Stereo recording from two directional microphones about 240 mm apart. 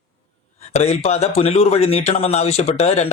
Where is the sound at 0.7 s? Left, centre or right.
Left.